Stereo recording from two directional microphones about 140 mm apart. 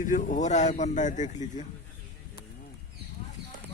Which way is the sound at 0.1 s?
65° left (ahead or behind).